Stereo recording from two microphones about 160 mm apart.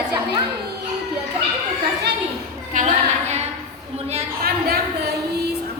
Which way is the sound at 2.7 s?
45° right (ahead or behind).